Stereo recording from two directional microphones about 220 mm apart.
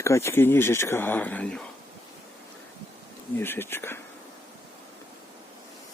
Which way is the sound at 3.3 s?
10° left (ahead or behind).